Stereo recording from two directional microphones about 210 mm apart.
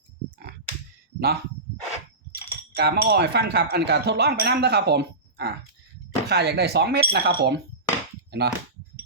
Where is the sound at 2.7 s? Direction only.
50° right (ahead or behind).